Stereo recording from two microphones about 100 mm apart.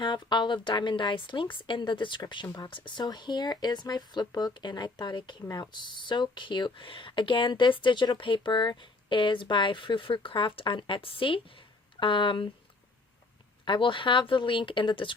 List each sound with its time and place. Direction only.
0.0 s a woman's voice: 50° left (ahead or behind)
13.7 s speech: 55° left (ahead or behind)